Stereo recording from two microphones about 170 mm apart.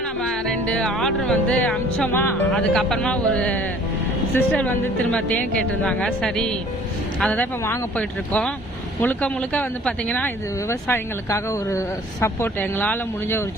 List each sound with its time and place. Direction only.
0.0 s speech: 5° left (ahead or behind)
7.6 s speech: 15° left (ahead or behind)